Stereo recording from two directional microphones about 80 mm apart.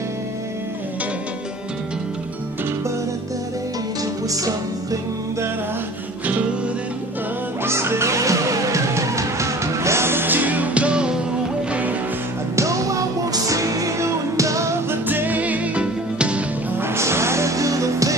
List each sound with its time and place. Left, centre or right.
7.6 s music: right; by 11.1 s centre
12.5 s music: right
15.0 s music: right
16.8 s music: right